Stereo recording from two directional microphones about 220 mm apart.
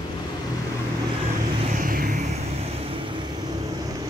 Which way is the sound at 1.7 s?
40° right (ahead or behind).